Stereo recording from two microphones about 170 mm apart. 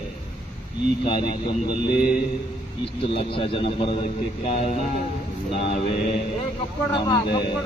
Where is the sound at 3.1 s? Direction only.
30° left (ahead or behind).